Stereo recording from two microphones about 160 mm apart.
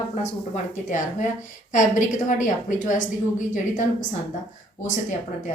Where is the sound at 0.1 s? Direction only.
50° left (ahead or behind).